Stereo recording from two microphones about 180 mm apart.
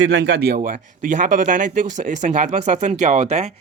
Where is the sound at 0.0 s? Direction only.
80° right.